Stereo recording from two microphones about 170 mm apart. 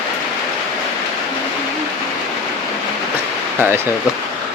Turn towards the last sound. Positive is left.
turn(degrees=-10)  # may be behind; listen again after turning